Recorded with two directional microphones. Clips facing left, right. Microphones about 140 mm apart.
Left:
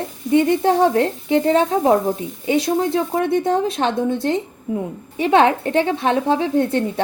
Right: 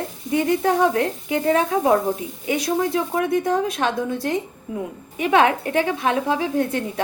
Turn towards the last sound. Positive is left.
turn(degrees=25)  # may be behind; listen again after turning